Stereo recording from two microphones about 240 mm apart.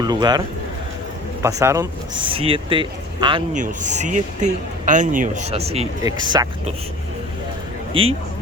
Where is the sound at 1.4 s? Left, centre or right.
Centre.